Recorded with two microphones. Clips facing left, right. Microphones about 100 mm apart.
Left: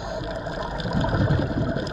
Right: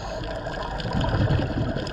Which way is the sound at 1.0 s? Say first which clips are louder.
Left 2 dB; 15° left (ahead or behind).